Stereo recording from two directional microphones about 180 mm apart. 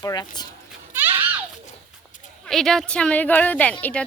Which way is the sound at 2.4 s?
Centre (ahead or behind).